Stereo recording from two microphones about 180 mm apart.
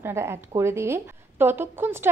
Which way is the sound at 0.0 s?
15° right (ahead or behind).